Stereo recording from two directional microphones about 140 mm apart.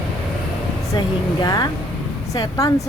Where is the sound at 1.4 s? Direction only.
25° left (ahead or behind).